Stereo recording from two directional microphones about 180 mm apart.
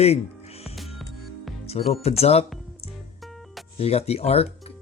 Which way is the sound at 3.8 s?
35° left (ahead or behind).